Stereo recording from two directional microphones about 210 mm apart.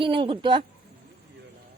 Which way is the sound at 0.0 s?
25° right (ahead or behind).